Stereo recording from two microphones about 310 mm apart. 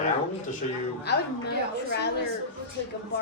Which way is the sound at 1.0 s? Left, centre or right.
Left.